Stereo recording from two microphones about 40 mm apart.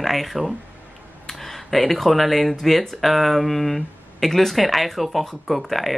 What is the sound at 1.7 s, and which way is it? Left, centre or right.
Speech, centre.